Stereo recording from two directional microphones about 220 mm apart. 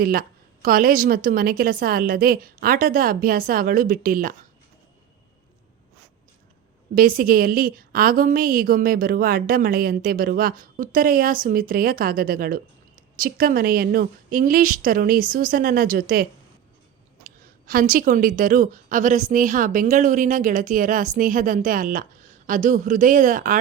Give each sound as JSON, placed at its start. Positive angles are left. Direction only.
{"t": 0.0, "sound": "a woman's voice", "side_deg": -40}
{"t": 6.9, "sound": "a woman's voice", "side_deg": -40}
{"t": 17.2, "sound": "a woman's voice", "side_deg": -40}